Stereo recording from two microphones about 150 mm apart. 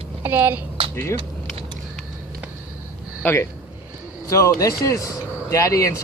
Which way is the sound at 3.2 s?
10° left (ahead or behind).